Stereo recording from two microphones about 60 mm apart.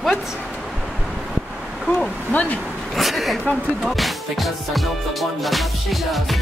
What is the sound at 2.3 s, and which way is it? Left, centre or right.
Speech, left.